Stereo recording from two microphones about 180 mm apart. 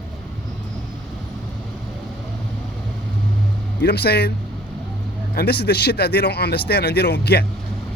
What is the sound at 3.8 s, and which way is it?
Speech, 65° left (ahead or behind).